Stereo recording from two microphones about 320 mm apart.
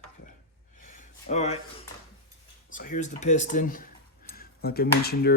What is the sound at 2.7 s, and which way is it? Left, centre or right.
Speech, left.